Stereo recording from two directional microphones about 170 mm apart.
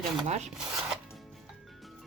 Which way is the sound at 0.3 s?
40° right (ahead or behind).